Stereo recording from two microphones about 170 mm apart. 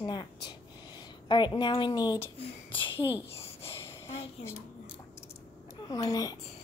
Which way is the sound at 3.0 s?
10° right (ahead or behind).